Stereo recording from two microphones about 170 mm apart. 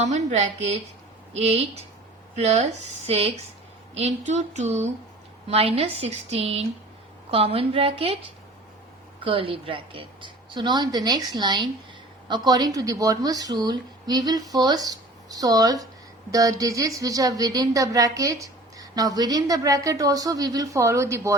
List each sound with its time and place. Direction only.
0.0 s a woman's voice: 45° right (ahead or behind)
9.2 s a woman's voice: 30° right (ahead or behind); by 21.3 s 15° right (ahead or behind)